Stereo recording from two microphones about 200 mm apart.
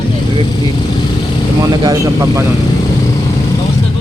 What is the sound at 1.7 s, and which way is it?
Speech, 20° right (ahead or behind).